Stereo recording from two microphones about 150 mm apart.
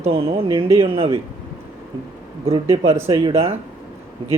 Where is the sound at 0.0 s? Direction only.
40° right (ahead or behind).